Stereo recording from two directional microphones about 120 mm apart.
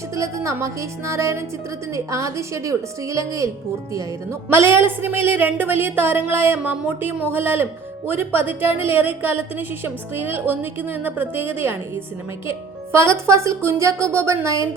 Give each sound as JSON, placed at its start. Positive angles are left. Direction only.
{"t": 0.2, "sound": "speech", "side_deg": -25}
{"t": 12.9, "sound": "speech", "side_deg": -25}